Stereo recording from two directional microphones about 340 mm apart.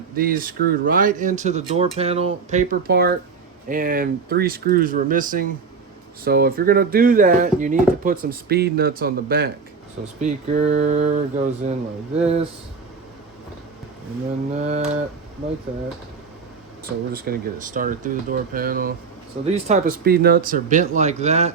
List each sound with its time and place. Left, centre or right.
0.2 s speech: right
14.5 s speech: right
17.1 s speech: right